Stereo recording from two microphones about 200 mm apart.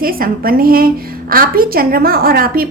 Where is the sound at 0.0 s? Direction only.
45° right (ahead or behind).